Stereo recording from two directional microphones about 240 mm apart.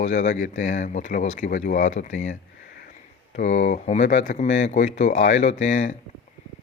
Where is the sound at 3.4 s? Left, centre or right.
Left.